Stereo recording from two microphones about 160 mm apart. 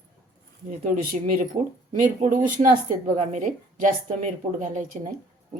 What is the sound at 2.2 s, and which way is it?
A woman's voice, 55° right (ahead or behind).